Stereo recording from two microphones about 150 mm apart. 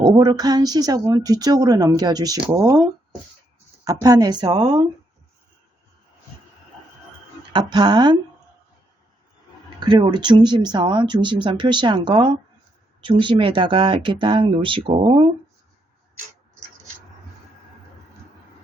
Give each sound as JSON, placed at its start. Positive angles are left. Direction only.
{"t": 0.0, "sound": "a woman's voice", "side_deg": -30}
{"t": 2.4, "sound": "speech", "side_deg": -15}
{"t": 3.8, "sound": "a woman's voice", "side_deg": -25}
{"t": 7.5, "sound": "a woman's voice", "side_deg": -30}
{"t": 9.6, "sound": "speech", "side_deg": -30}